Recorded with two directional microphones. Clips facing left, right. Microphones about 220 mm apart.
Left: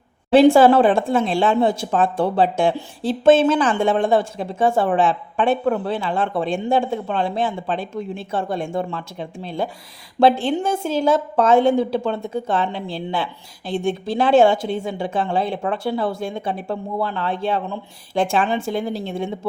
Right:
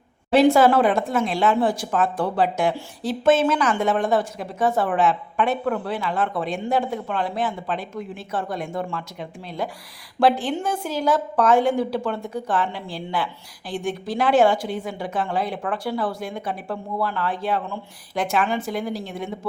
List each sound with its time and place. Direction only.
0.3 s speech: 30° left (ahead or behind)